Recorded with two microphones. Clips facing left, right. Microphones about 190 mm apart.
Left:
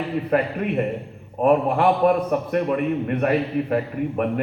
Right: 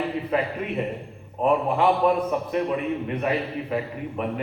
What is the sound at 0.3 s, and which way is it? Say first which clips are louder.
A man's voice: left 4 dB; 55° left (ahead or behind).